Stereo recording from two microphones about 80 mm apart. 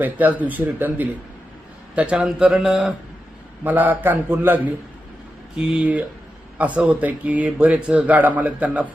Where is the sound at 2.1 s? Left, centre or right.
Centre.